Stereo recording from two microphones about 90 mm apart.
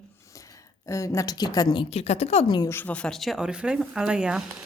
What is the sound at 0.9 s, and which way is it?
Speech, 35° left (ahead or behind).